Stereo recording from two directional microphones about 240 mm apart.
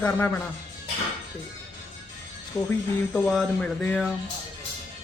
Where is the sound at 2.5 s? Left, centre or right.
Centre.